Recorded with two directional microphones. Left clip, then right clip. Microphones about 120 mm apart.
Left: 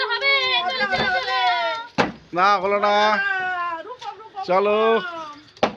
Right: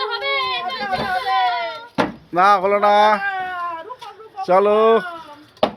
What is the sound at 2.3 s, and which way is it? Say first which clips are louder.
Speech: right 4 dB; 35° right (ahead or behind).